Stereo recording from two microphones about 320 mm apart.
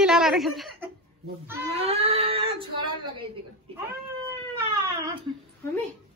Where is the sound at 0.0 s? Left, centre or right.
Centre.